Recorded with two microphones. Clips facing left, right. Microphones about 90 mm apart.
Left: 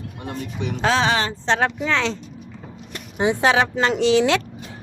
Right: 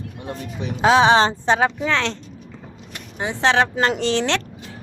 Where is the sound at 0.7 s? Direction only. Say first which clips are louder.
Right 6 dB; 15° right (ahead or behind).